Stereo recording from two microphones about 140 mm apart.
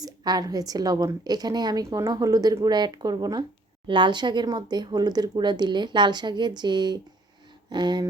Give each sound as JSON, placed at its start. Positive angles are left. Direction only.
{"t": 0.0, "sound": "a woman's voice", "side_deg": -25}